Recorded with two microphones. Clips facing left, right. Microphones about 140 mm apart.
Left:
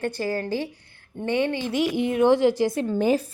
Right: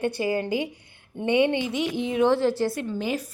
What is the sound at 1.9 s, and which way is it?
Speech, 55° left (ahead or behind).